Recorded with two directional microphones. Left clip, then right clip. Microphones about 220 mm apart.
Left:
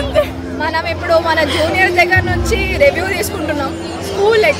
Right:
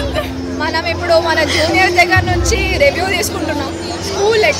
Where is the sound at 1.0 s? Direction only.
10° left (ahead or behind).